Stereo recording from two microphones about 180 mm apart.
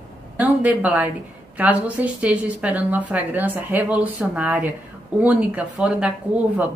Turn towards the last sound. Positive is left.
turn(degrees=-5)  # may be behind; listen again after turning